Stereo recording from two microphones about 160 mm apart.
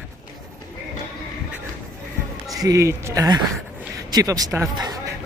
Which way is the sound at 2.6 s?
20° right (ahead or behind).